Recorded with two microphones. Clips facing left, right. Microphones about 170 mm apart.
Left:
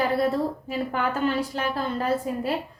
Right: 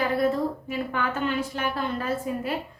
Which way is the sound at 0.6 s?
40° left (ahead or behind).